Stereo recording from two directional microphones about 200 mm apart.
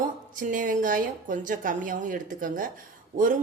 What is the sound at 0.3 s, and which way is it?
A woman's voice, 40° right (ahead or behind).